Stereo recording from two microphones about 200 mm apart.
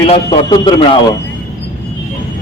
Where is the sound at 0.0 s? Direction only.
25° left (ahead or behind).